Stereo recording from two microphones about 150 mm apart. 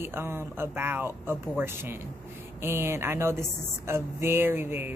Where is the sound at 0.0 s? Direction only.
15° right (ahead or behind).